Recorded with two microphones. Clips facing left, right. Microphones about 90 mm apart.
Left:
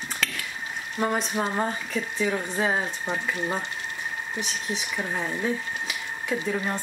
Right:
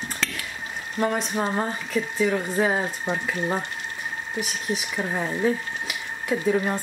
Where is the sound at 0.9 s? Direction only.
Centre (ahead or behind).